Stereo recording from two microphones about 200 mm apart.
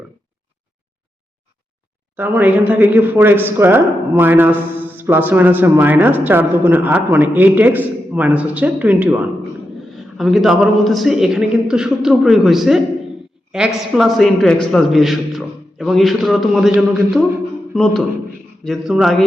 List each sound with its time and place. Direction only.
2.1 s a man's voice: 10° right (ahead or behind)